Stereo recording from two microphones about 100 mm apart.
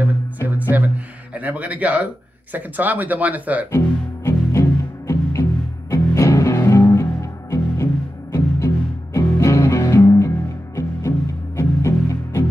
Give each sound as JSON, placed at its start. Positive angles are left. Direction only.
{"t": 0.6, "sound": "music", "side_deg": -15}
{"t": 2.5, "sound": "speech", "side_deg": -15}
{"t": 3.7, "sound": "music", "side_deg": 30}